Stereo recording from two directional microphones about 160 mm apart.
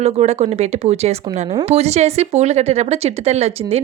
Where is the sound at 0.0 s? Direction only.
40° right (ahead or behind).